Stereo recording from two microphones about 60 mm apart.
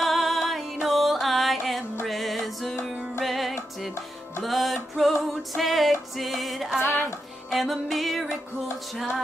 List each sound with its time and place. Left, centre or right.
0.0 s music: centre
6.8 s music: left
7.5 s music: centre